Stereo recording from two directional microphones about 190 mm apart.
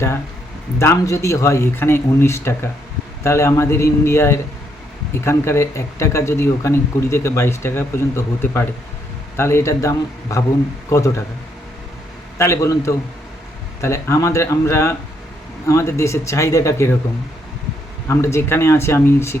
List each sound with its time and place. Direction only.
0.8 s speech: 15° left (ahead or behind)
12.4 s speech: 15° left (ahead or behind)
18.1 s speech: 15° left (ahead or behind)